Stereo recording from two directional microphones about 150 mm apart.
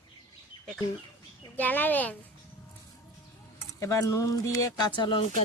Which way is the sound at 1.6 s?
10° left (ahead or behind).